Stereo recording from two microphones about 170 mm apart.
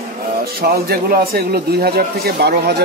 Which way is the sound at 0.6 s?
60° right (ahead or behind).